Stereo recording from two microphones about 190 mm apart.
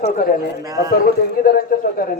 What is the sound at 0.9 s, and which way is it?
A man's voice, 50° left (ahead or behind).